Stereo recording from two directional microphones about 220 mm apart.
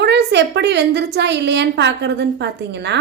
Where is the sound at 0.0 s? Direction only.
50° right (ahead or behind).